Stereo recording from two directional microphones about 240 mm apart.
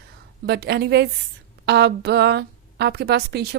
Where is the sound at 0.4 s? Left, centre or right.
Right.